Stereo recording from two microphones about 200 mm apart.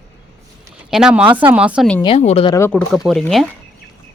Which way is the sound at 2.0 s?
30° left (ahead or behind).